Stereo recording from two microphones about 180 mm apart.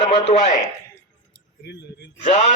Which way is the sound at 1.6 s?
65° left (ahead or behind).